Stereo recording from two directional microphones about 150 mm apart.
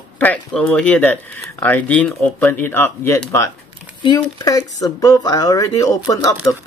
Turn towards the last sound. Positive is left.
turn(degrees=25)  # may be behind; listen again after turning